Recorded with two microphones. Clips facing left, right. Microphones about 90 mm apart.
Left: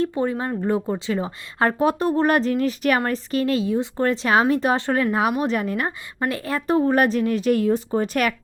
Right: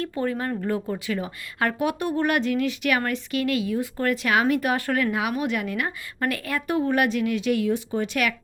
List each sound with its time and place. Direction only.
0.0 s a woman's voice: 20° left (ahead or behind)
6.1 s a woman's voice: 25° left (ahead or behind)